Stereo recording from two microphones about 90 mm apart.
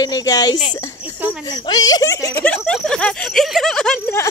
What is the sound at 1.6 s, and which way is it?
Speech, 45° left (ahead or behind).